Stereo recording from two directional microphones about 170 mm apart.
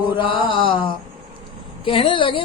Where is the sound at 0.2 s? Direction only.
30° left (ahead or behind).